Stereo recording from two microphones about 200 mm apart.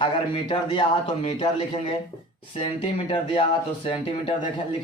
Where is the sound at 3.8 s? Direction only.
25° left (ahead or behind).